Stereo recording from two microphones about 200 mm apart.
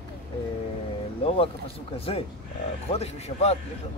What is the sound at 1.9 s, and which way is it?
A man's voice, 30° left (ahead or behind).